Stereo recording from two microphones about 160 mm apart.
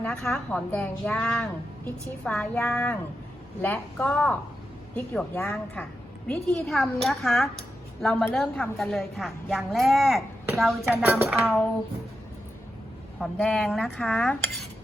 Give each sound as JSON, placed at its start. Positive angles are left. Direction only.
{"t": 0.0, "sound": "a woman's voice", "side_deg": 5}
{"t": 10.9, "sound": "a sound", "side_deg": -15}
{"t": 13.1, "sound": "a woman's voice", "side_deg": 5}